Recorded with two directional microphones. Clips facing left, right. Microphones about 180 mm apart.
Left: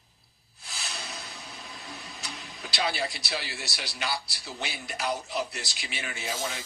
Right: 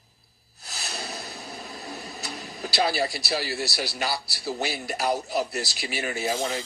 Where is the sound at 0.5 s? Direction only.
40° right (ahead or behind).